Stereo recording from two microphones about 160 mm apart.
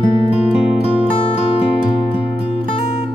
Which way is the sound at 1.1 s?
35° left (ahead or behind).